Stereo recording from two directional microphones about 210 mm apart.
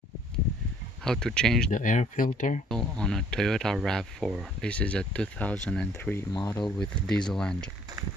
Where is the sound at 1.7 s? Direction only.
40° left (ahead or behind).